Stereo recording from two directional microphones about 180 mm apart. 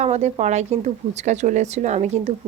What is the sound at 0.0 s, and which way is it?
Speech, 40° right (ahead or behind).